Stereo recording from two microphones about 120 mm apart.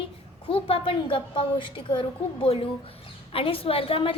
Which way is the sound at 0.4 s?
50° left (ahead or behind).